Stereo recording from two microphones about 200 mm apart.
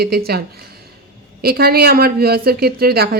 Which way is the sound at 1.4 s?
50° right (ahead or behind).